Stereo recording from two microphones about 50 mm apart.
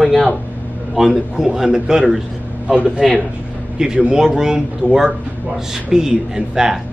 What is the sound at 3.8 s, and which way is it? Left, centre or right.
A man's voice, centre.